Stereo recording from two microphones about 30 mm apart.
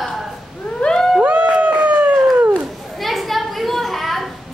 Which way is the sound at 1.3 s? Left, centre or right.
Right.